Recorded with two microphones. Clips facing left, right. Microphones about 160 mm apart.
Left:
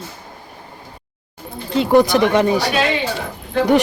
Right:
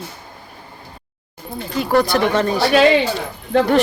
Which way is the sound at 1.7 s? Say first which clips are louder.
Left 4 dB; 20° left (ahead or behind).